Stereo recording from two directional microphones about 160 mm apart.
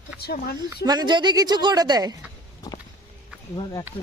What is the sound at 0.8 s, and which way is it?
Speech, 25° right (ahead or behind).